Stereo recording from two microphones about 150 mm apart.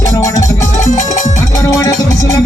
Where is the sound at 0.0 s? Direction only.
25° left (ahead or behind).